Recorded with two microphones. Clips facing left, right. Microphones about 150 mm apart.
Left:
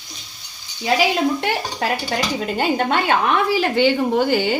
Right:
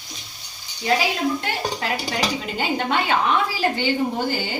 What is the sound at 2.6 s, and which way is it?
A woman's voice, 55° left (ahead or behind).